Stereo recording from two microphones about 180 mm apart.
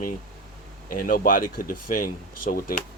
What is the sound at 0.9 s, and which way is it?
Speech, 50° left (ahead or behind).